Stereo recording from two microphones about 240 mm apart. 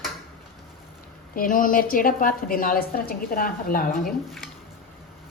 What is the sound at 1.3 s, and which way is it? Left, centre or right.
A woman's voice, left.